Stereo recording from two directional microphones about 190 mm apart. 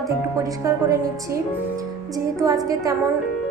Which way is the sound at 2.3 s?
15° right (ahead or behind).